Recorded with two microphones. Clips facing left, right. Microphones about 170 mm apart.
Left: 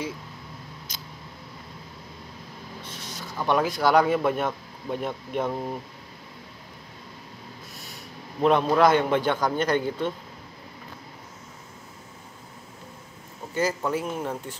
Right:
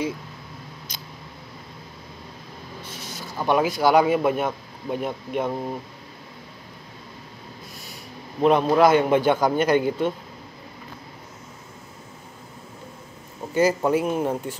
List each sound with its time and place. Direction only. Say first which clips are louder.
2.8 s speech: right 2 dB; 5° right (ahead or behind)
8.4 s a man's voice: right 2 dB; 5° right (ahead or behind)
13.6 s a man's voice: right 6 dB; 10° right (ahead or behind)